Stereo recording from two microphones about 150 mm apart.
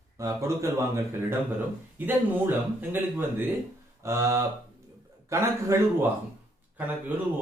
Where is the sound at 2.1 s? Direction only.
15° right (ahead or behind).